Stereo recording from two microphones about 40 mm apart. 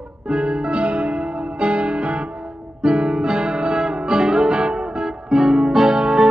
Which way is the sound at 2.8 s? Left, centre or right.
Centre.